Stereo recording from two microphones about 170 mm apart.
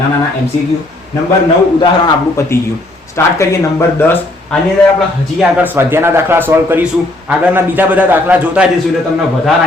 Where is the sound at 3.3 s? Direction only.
15° left (ahead or behind).